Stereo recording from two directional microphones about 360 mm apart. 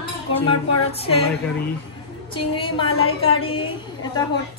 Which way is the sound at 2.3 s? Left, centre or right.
Centre.